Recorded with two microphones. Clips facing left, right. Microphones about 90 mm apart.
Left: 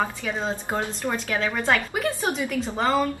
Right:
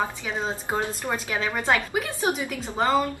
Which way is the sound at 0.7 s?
15° right (ahead or behind).